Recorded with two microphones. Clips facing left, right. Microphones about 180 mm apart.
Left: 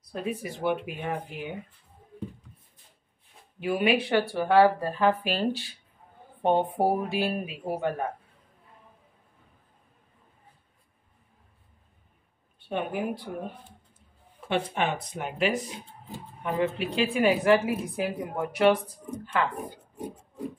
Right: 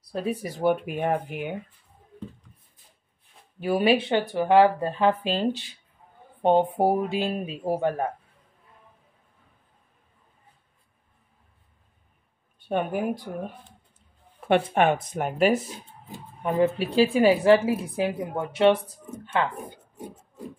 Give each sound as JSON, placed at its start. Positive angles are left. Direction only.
{"t": 0.0, "sound": "a woman's voice", "side_deg": -30}
{"t": 3.5, "sound": "a woman's voice", "side_deg": -35}
{"t": 7.4, "sound": "a woman's voice", "side_deg": -30}
{"t": 12.5, "sound": "a woman's voice", "side_deg": -45}
{"t": 14.5, "sound": "speech", "side_deg": -55}
{"t": 16.5, "sound": "a woman's voice", "side_deg": -35}